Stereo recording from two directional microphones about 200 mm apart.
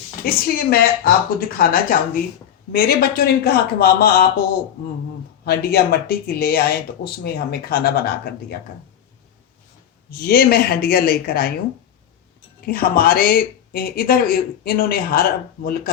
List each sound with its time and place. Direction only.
0.3 s speech: 50° left (ahead or behind)
5.5 s speech: 50° left (ahead or behind)
10.1 s speech: 50° left (ahead or behind)
12.6 s speech: 50° left (ahead or behind)